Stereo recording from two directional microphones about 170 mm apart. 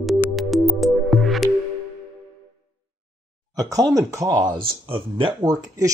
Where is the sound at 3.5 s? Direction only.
20° right (ahead or behind).